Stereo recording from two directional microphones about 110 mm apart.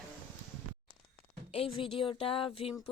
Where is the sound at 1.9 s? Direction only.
55° left (ahead or behind).